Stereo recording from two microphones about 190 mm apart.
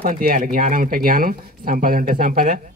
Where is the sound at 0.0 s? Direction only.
50° right (ahead or behind).